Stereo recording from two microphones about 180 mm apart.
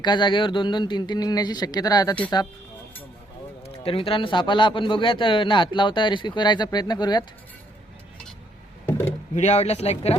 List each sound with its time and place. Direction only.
0.0 s a man's voice: 25° left (ahead or behind)
3.6 s a man's voice: 30° left (ahead or behind)
9.3 s speech: 40° left (ahead or behind)